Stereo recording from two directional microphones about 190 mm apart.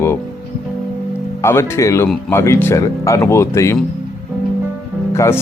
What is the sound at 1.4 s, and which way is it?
Speech, 15° left (ahead or behind).